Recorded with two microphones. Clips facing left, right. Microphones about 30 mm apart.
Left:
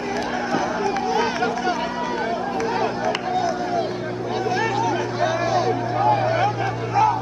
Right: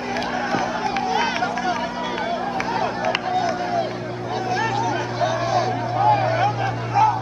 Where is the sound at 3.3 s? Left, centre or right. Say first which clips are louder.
Even; centre.